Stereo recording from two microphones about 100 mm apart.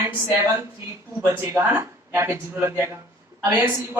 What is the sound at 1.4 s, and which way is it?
Speech, 25° right (ahead or behind).